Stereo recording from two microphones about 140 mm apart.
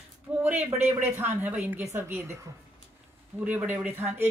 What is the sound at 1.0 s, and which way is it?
Speech, 15° right (ahead or behind).